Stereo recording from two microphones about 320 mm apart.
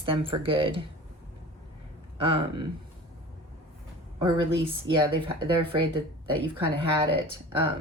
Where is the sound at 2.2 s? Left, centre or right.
Centre.